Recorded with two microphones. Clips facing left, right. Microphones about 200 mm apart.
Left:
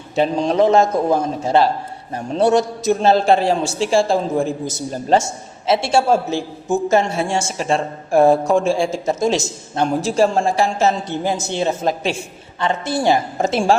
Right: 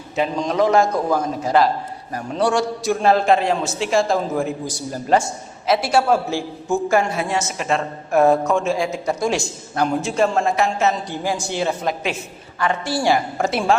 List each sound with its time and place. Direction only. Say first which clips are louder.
0.2 s a man's voice: left 4 dB; 30° left (ahead or behind)